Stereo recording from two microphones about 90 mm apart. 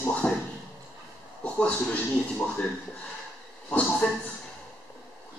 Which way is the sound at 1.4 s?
15° left (ahead or behind).